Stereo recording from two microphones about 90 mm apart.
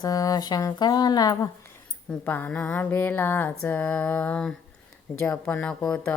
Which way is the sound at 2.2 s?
20° left (ahead or behind).